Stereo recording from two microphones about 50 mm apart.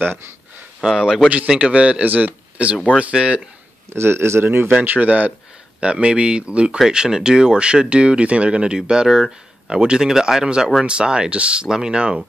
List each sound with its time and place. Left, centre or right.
0.8 s speech: centre
1.5 s speech: right
3.9 s a man's voice: right
4.5 s speech: right
5.8 s speech: right